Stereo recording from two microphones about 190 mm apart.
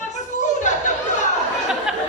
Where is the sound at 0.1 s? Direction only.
40° left (ahead or behind).